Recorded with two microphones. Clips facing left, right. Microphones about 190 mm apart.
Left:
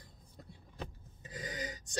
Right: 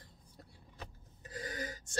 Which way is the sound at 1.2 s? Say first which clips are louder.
Even; 20° left (ahead or behind).